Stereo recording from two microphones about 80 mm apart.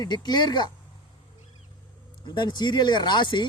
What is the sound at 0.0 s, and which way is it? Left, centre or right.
Speech, left.